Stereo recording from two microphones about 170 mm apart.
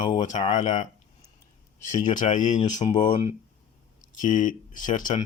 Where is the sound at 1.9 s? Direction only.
45° left (ahead or behind).